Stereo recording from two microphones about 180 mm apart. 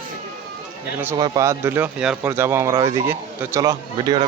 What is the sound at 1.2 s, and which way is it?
Speech, 15° right (ahead or behind).